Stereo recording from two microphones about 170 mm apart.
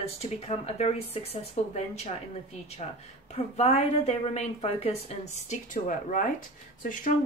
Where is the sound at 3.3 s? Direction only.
40° left (ahead or behind).